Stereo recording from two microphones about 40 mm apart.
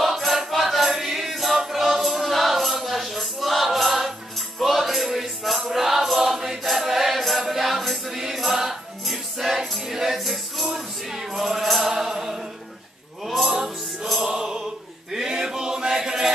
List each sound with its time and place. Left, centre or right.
0.0 s music: centre
9.6 s music: centre
10.1 s music: centre
14.2 s a sound: centre